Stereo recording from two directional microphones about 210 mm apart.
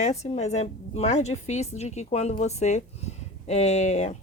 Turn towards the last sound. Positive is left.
turn(degrees=35)  # may be behind; listen again after turning